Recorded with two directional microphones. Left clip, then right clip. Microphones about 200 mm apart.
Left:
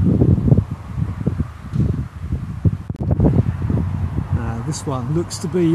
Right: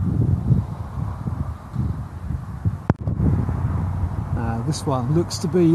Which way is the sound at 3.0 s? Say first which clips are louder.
Left 8 dB; 35° left (ahead or behind).